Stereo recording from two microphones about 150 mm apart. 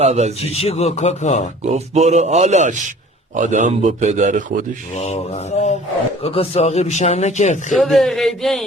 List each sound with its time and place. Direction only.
0.0 s speech: 45° right (ahead or behind)
0.4 s a man's voice: 45° left (ahead or behind)
1.6 s speech: 45° right (ahead or behind)
4.9 s a man's voice: 45° left (ahead or behind)
7.7 s speech: centre (ahead or behind)